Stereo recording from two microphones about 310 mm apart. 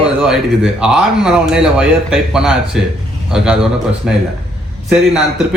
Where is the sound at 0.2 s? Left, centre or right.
Centre.